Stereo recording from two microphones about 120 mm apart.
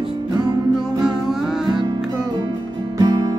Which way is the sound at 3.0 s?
35° right (ahead or behind).